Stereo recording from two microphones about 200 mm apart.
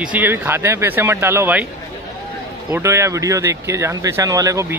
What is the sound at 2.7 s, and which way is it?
Speech, 15° right (ahead or behind).